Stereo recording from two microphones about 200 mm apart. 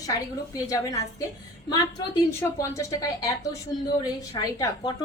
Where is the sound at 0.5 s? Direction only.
15° left (ahead or behind).